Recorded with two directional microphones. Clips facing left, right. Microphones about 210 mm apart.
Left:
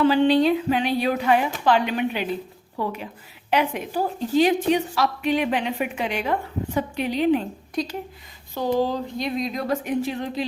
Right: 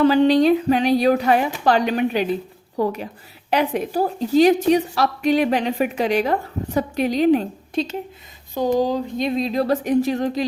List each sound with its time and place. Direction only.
0.0 s a woman's voice: 40° right (ahead or behind)
7.8 s speech: 25° right (ahead or behind)
8.5 s speech: 15° right (ahead or behind); by 10.4 s 40° right (ahead or behind)